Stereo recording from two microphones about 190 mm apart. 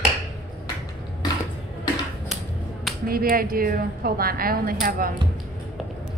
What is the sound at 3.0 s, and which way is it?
A woman's voice, 50° right (ahead or behind).